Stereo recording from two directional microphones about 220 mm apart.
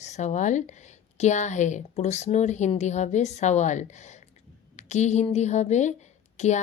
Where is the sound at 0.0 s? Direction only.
30° left (ahead or behind).